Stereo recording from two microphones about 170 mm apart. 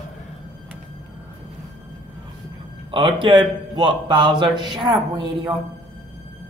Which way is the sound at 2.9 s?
30° right (ahead or behind).